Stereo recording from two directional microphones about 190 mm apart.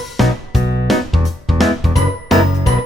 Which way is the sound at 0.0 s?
Centre (ahead or behind).